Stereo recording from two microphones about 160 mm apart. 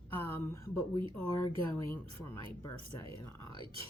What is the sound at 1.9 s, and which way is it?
Speech, 15° left (ahead or behind).